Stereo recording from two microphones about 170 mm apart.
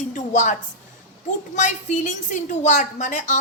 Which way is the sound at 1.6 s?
45° left (ahead or behind).